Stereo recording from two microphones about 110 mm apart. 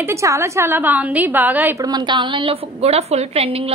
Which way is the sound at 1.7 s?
35° right (ahead or behind).